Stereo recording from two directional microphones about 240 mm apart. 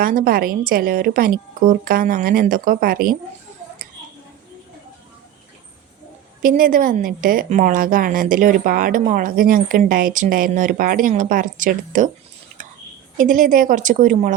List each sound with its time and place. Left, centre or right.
0.0 s a woman's voice: right
6.4 s a woman's voice: right
13.1 s a woman's voice: right